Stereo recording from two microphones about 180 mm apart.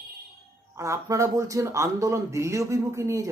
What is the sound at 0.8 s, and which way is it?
A woman's voice, 15° right (ahead or behind).